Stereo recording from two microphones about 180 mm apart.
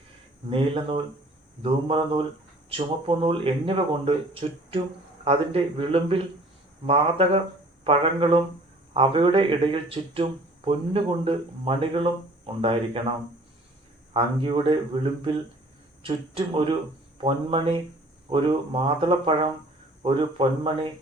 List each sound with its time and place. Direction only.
0.5 s speech: 30° right (ahead or behind)
14.1 s speech: 30° right (ahead or behind)